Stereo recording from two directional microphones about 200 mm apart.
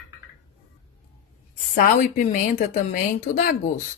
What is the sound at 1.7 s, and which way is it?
A woman's voice, 40° left (ahead or behind).